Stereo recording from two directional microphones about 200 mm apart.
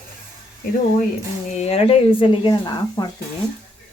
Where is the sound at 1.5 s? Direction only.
35° left (ahead or behind).